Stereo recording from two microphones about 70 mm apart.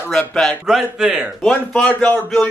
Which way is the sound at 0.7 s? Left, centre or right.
Centre.